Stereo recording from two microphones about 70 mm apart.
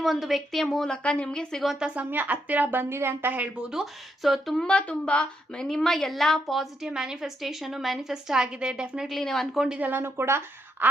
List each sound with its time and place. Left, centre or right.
0.0 s a woman's voice: centre
1.6 s a woman's voice: centre
2.0 s a woman's voice: right
3.7 s a woman's voice: centre
4.6 s a woman's voice: centre
5.6 s a woman's voice: centre
9.0 s a woman's voice: centre
9.7 s a woman's voice: right
10.0 s speech: right